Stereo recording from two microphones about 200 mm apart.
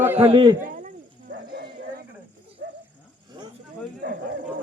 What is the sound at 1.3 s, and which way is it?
Snake, 55° right (ahead or behind).